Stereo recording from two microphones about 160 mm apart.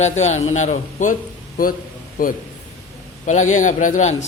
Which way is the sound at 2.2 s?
65° left (ahead or behind).